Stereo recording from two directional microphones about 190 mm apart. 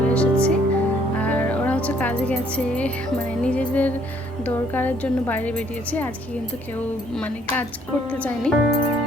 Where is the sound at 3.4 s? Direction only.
5° left (ahead or behind).